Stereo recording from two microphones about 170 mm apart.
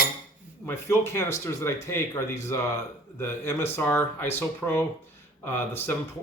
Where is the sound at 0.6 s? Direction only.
15° left (ahead or behind).